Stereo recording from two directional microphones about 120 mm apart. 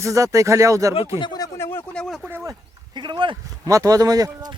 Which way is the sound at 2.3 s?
20° right (ahead or behind).